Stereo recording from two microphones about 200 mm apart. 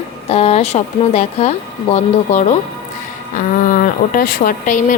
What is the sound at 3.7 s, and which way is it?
Speech, 45° left (ahead or behind).